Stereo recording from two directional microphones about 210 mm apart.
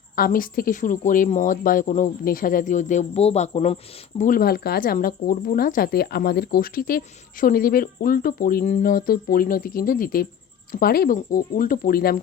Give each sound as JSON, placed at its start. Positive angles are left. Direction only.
{"t": 0.2, "sound": "speech", "side_deg": 40}
{"t": 4.2, "sound": "speech", "side_deg": 40}